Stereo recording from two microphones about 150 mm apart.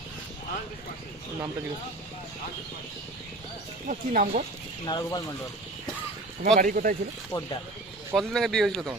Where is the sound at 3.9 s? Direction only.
65° right (ahead or behind).